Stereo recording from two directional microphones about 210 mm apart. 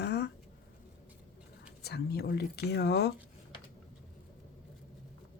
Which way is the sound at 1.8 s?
50° left (ahead or behind).